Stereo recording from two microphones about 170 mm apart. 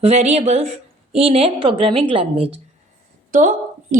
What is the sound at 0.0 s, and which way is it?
A woman's voice, 40° right (ahead or behind).